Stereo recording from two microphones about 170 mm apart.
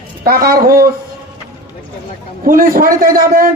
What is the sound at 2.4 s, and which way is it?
A man's voice, 55° right (ahead or behind).